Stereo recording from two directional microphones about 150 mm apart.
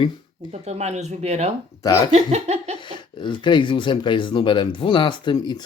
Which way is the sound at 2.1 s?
45° right (ahead or behind).